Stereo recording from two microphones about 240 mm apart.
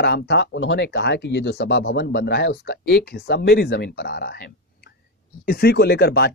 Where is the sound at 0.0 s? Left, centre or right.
Left.